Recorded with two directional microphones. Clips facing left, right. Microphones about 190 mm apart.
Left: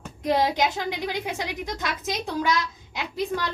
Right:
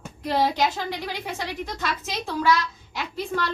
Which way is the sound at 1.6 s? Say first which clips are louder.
Left 1 dB; 15° left (ahead or behind).